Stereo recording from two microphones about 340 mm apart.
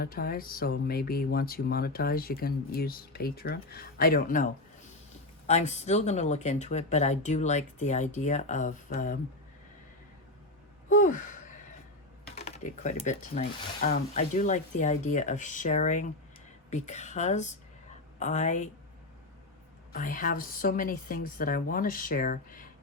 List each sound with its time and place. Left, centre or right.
0.0 s speech: left
5.5 s speech: centre
10.8 s gasp: left
12.3 s speech: centre
19.9 s speech: left